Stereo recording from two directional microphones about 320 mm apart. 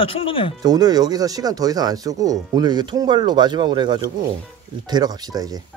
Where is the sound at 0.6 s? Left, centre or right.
Centre.